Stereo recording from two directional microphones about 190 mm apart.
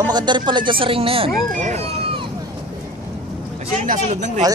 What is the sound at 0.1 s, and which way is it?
Speech, 25° right (ahead or behind).